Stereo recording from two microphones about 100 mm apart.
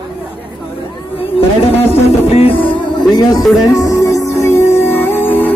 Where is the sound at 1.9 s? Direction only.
90° left; by 2.7 s 70° left (ahead or behind).